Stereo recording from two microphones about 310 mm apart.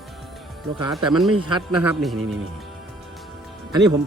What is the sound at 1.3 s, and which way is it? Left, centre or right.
Speech, right.